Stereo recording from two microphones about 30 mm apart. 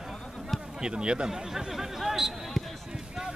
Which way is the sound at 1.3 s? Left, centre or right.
Centre.